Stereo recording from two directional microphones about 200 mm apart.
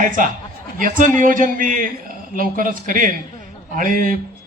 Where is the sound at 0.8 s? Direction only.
40° right (ahead or behind).